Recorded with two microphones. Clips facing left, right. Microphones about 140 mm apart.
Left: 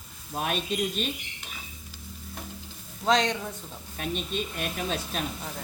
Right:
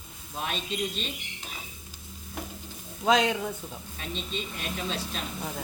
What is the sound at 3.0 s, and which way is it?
Stir, 10° right (ahead or behind).